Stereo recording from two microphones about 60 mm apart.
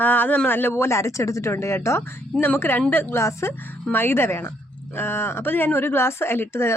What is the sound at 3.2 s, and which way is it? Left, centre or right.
Speech, left.